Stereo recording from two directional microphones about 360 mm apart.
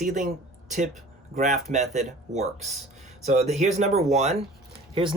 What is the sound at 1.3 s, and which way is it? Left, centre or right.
Speech, centre.